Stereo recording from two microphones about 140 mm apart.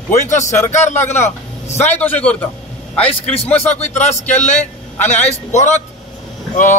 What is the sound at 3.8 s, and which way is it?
A man's voice, 55° left (ahead or behind).